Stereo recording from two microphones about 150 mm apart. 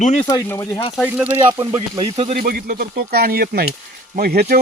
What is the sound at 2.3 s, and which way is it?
Speech, 75° right (ahead or behind).